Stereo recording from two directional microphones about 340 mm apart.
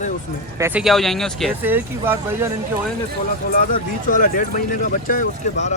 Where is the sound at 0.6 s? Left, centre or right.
Centre.